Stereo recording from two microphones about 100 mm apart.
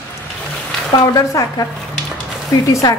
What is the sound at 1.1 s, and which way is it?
Speech, 35° left (ahead or behind).